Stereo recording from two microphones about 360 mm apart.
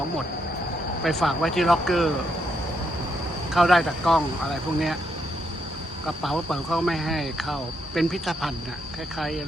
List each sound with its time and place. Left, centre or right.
1.0 s speech: centre
3.5 s speech: centre
6.1 s speech: centre